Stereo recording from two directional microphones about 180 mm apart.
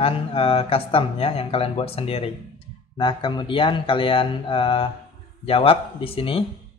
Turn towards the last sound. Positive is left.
turn(degrees=30)  # may be behind; listen again after turning